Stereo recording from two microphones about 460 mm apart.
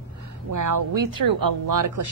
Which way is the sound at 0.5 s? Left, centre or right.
Right.